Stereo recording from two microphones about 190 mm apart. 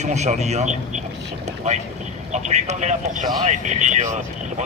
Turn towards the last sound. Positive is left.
turn(degrees=-40)  # may be behind; listen again after turning